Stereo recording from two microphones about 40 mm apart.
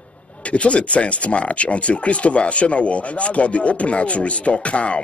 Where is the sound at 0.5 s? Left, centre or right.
Left.